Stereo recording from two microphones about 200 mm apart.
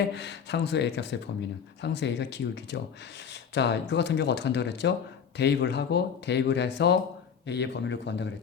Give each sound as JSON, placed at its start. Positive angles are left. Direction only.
{"t": 0.2, "sound": "speech", "side_deg": 60}